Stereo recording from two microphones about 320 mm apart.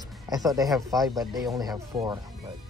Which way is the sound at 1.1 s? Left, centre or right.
Centre.